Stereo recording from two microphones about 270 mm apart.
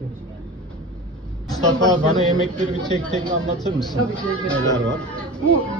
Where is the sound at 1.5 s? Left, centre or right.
Centre.